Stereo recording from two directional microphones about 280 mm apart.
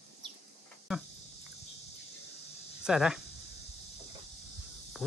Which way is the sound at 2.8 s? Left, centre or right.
Centre.